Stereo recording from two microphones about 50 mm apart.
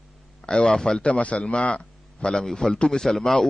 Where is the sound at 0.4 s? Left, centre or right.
Centre.